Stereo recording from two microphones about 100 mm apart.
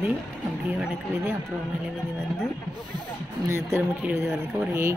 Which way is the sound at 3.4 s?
30° right (ahead or behind).